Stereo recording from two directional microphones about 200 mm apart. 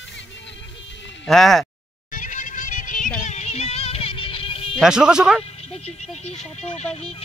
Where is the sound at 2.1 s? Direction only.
40° left (ahead or behind).